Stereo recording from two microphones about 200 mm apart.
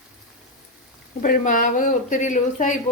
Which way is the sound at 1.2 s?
40° left (ahead or behind).